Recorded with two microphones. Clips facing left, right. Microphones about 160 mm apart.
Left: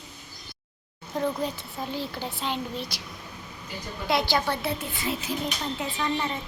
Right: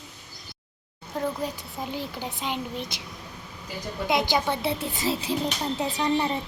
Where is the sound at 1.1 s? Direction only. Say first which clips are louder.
Left 1 dB; 5° right (ahead or behind).